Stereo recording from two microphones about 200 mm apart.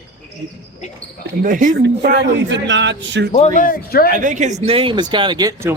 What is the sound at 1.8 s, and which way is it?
A man's voice, 60° right (ahead or behind).